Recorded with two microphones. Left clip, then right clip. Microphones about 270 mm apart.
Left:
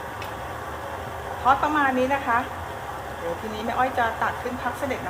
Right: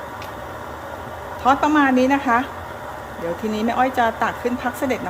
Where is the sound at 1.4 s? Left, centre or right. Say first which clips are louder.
Right 4 dB; right.